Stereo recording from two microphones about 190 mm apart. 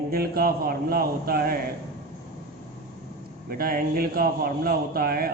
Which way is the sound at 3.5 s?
50° right (ahead or behind).